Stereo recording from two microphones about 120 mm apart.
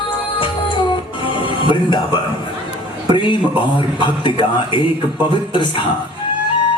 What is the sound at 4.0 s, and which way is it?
A man's voice, 40° left (ahead or behind).